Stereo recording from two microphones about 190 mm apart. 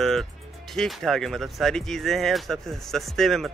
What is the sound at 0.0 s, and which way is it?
Speech, centre (ahead or behind).